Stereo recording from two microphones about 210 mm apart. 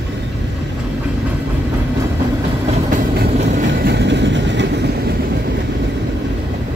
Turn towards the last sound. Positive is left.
turn(degrees=-60)  # may be behind; listen again after turning